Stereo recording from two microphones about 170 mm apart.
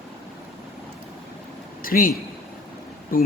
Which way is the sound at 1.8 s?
55° left (ahead or behind).